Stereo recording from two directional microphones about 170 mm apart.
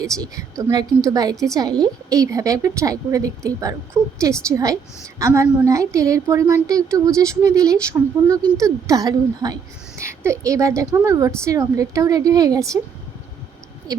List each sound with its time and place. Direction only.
0.0 s a woman's voice: 20° right (ahead or behind)